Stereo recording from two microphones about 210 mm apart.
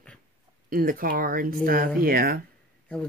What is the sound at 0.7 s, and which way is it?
Speech, 45° right (ahead or behind).